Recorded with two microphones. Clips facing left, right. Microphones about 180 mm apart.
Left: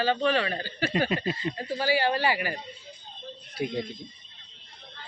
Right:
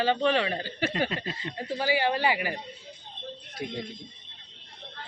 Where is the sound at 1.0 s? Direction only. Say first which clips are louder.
Left 6 dB; 15° left (ahead or behind).